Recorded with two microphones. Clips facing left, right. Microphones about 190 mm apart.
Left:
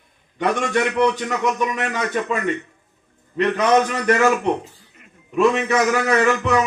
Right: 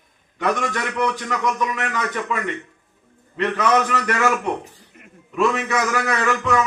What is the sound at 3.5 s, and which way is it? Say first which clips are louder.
Speech: left 2 dB; 25° left (ahead or behind).